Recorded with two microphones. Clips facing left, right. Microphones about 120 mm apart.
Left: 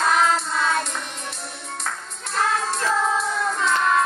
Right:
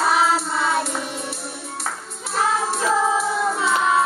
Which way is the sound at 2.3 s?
10° right (ahead or behind).